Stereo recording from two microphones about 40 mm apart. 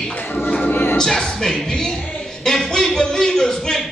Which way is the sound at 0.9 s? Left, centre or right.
Centre.